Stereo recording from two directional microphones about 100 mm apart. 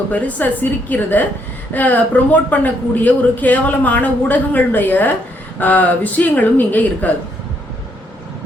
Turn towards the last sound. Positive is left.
turn(degrees=15)  # may be behind; listen again after turning